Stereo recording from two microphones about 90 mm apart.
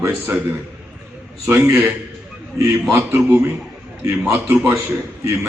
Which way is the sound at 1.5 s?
25° right (ahead or behind).